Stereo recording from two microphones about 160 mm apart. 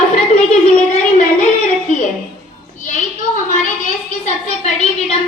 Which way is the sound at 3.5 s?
50° left (ahead or behind).